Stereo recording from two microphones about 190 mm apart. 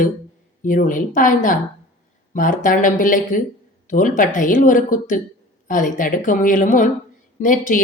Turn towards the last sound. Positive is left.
turn(degrees=45)  # may be behind; listen again after turning